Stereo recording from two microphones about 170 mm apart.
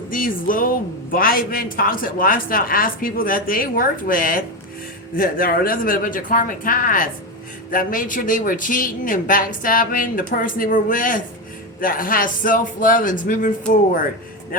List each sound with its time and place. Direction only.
0.1 s a man's voice: 55° left (ahead or behind)